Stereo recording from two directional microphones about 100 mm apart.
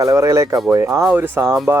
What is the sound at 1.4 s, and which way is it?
Speech, centre (ahead or behind).